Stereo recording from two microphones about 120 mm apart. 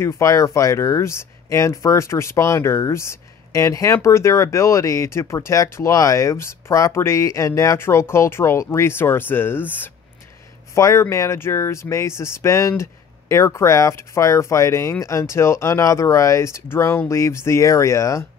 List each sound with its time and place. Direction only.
0.0 s speech: 25° left (ahead or behind)